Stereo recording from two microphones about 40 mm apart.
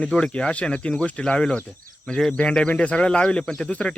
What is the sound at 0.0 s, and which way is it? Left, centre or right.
Speech, left.